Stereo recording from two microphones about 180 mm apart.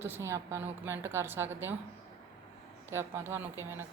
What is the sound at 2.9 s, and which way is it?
Speech, 15° right (ahead or behind).